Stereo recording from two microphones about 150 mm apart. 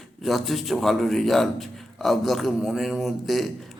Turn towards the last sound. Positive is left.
turn(degrees=0)  # may be behind; listen again after turning